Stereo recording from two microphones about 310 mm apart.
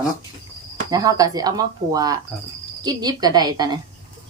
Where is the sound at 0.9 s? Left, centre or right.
Centre.